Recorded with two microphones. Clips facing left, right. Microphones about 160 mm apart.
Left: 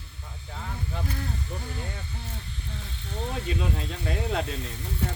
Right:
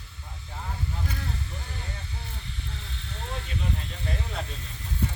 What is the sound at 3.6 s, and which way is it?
Speech, 90° left.